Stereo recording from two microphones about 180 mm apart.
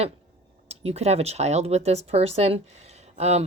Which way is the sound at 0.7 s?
35° right (ahead or behind).